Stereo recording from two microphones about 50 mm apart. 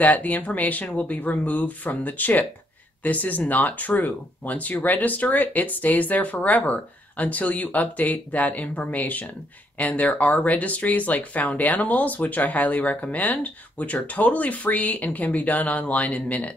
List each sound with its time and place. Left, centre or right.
0.0 s speech: left